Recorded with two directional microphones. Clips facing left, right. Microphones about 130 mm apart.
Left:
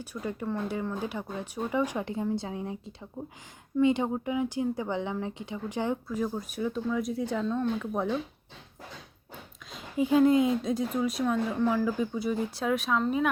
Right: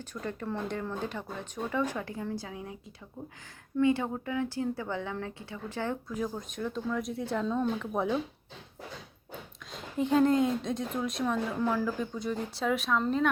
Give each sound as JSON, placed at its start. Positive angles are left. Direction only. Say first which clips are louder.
{"t": 0.0, "sound": "speech", "louder": "left 3 dB", "side_deg": 10}
{"t": 3.8, "sound": "speech", "louder": "left 2 dB", "side_deg": 20}
{"t": 6.1, "sound": "speech", "louder": "left 3 dB", "side_deg": 5}
{"t": 9.7, "sound": "speech", "louder": "left 2 dB", "side_deg": 5}